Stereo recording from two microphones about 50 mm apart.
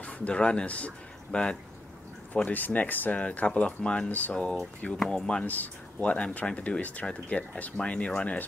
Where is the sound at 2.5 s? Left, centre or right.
Left.